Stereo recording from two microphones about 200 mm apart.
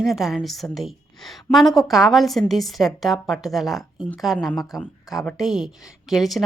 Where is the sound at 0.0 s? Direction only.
Centre (ahead or behind).